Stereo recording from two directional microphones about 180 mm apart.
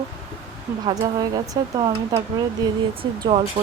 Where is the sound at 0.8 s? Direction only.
25° right (ahead or behind).